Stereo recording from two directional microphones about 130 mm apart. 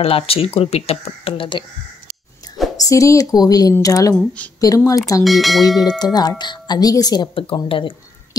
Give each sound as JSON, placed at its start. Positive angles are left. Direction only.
{"t": 0.0, "sound": "speech", "side_deg": 45}
{"t": 2.8, "sound": "speech", "side_deg": 25}
{"t": 5.2, "sound": "speech", "side_deg": 0}
{"t": 5.8, "sound": "speech", "side_deg": 30}
{"t": 7.3, "sound": "speech", "side_deg": 40}